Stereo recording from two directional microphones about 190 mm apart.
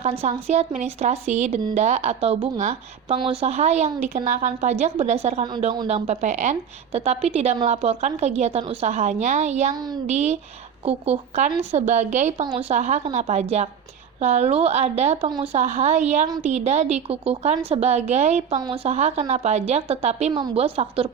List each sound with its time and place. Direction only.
0.0 s a woman's voice: 35° right (ahead or behind)
5.9 s a woman's voice: 35° right (ahead or behind)
9.7 s a woman's voice: 20° right (ahead or behind)
10.1 s a woman's voice: 35° right (ahead or behind)